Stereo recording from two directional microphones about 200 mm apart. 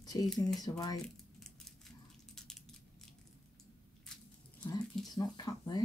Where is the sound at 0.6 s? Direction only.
20° left (ahead or behind).